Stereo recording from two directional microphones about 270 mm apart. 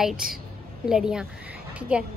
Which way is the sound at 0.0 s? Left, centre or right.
Centre.